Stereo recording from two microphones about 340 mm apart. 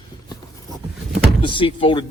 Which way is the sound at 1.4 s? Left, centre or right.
Centre.